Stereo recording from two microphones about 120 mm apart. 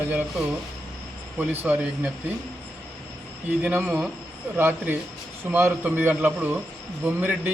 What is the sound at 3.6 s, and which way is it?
Speech, 10° right (ahead or behind).